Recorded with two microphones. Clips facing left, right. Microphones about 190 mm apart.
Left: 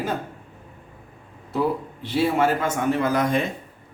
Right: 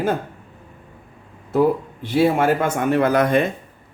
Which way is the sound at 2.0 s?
50° right (ahead or behind).